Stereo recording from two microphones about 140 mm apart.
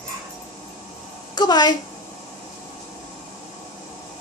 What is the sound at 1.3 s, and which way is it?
Speech, 30° left (ahead or behind).